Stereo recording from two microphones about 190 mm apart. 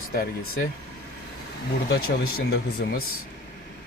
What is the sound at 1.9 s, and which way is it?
Speech, 55° left (ahead or behind).